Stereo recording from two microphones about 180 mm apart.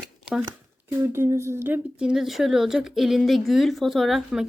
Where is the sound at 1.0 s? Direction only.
15° right (ahead or behind).